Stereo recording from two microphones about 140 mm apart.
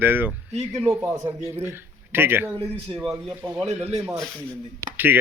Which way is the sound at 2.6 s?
45° right (ahead or behind).